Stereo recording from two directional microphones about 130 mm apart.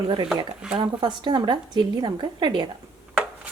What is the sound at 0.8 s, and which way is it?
A woman's voice, 35° right (ahead or behind).